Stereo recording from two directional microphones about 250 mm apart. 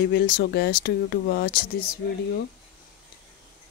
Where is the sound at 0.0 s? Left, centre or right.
Left.